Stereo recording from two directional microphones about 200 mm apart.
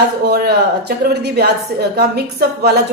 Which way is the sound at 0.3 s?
55° right (ahead or behind).